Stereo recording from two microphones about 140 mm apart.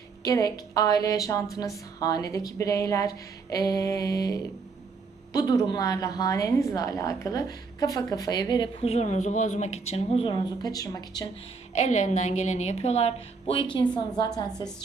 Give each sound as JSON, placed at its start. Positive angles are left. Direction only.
{"t": 0.3, "sound": "a woman's voice", "side_deg": 25}
{"t": 11.7, "sound": "a woman's voice", "side_deg": 55}